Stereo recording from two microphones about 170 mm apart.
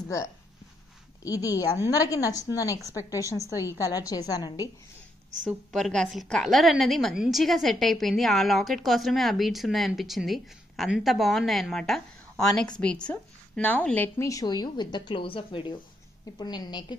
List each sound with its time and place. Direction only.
1.2 s a woman's voice: 20° left (ahead or behind)
5.5 s a woman's voice: centre (ahead or behind); by 16.8 s 25° left (ahead or behind)